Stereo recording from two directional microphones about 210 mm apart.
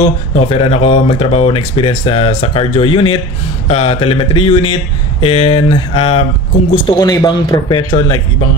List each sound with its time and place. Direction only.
0.3 s speech: 30° left (ahead or behind)